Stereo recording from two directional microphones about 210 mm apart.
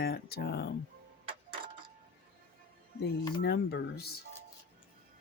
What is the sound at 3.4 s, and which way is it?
Speech, 50° left (ahead or behind).